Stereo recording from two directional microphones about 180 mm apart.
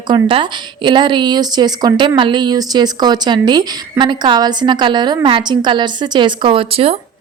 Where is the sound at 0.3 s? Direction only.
25° right (ahead or behind).